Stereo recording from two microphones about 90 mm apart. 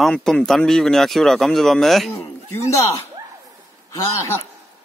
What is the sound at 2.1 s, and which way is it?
Speech, 30° left (ahead or behind).